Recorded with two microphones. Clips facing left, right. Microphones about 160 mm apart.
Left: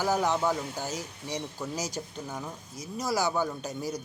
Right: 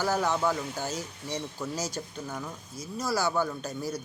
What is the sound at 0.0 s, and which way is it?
Speech, 15° left (ahead or behind).